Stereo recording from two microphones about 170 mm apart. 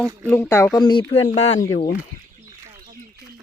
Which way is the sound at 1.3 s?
40° left (ahead or behind).